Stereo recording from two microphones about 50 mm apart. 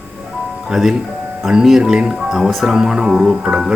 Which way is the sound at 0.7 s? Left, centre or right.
Centre.